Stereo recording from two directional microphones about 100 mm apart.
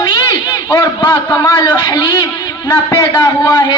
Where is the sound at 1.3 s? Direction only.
45° left (ahead or behind).